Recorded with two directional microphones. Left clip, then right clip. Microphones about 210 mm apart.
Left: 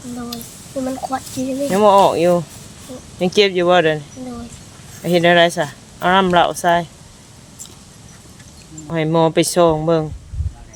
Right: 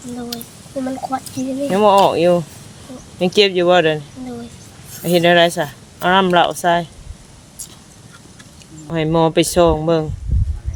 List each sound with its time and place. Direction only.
0.9 s speech: 5° left (ahead or behind)
5.0 s speech: centre (ahead or behind)
8.9 s speech: centre (ahead or behind)